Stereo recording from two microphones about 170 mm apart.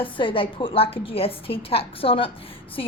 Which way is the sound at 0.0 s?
30° left (ahead or behind).